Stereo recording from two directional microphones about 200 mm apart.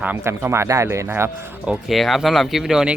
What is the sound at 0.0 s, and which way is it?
Speech, 10° right (ahead or behind).